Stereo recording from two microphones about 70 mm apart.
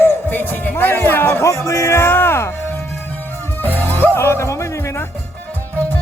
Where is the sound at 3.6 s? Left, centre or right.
Left.